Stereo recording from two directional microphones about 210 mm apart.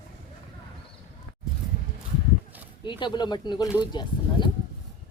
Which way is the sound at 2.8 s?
20° left (ahead or behind).